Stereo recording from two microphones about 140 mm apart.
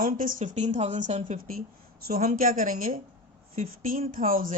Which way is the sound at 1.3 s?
90° right.